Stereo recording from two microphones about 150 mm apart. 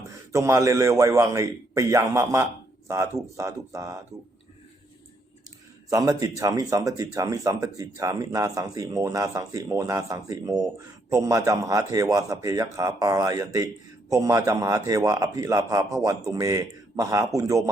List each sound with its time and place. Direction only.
0.1 s speech: 20° right (ahead or behind)
5.9 s speech: 25° right (ahead or behind)